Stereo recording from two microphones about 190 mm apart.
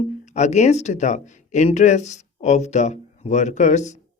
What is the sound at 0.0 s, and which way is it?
Speech, 35° left (ahead or behind).